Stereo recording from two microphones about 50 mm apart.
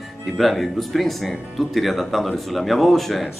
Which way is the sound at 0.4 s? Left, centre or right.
Centre.